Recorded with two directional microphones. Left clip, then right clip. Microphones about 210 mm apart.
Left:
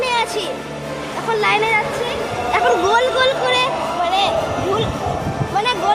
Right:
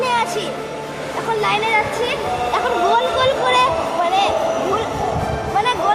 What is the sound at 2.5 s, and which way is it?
Speech, 25° left (ahead or behind).